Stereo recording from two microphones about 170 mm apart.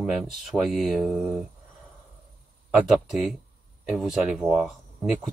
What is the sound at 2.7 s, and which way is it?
Speech, 5° right (ahead or behind).